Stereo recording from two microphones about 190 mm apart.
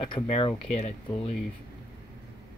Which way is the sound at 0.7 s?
35° left (ahead or behind).